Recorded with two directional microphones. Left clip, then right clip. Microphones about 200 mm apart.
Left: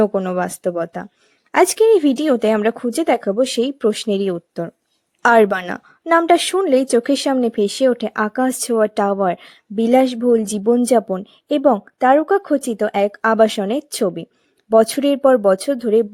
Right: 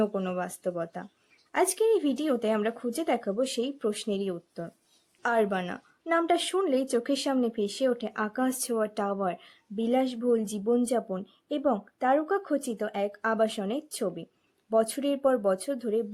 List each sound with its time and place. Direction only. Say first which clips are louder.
0.0 s a woman's voice: left 12 dB; 40° left (ahead or behind)